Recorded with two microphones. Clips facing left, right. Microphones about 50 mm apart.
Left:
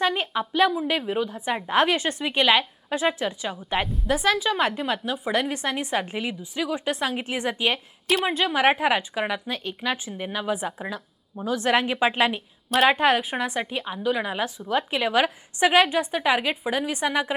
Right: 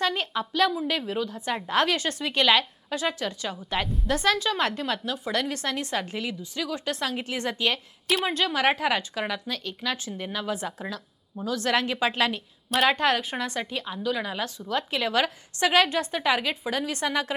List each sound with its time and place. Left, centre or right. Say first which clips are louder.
0.0 s a woman's voice: left 3 dB; centre
3.8 s a woman's voice: left 1 dB; centre